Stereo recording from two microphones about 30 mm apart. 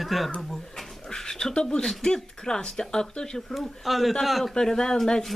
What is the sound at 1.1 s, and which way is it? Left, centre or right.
Dog, left.